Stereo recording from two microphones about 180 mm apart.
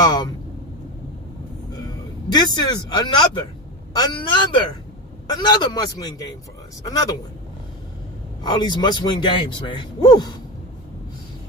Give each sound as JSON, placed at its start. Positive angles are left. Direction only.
{"t": 0.0, "sound": "speech", "side_deg": 25}
{"t": 2.3, "sound": "speech", "side_deg": 25}
{"t": 8.4, "sound": "speech", "side_deg": 25}